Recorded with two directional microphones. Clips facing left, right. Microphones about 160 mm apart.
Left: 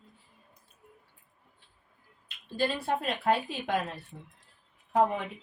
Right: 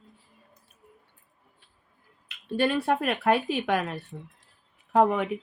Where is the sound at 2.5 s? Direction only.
70° right (ahead or behind).